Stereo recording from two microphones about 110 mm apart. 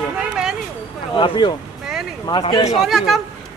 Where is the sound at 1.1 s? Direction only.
45° left (ahead or behind).